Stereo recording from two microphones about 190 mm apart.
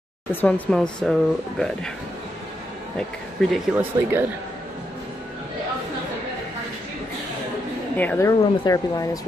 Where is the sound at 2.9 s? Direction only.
Centre (ahead or behind).